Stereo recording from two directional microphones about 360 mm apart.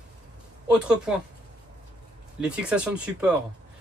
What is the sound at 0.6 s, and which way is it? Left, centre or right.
Speech, centre.